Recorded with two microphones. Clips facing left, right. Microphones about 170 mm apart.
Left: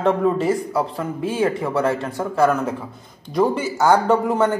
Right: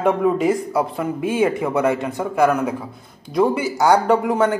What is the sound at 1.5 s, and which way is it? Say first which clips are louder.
A man's voice: right 2 dB; 20° right (ahead or behind).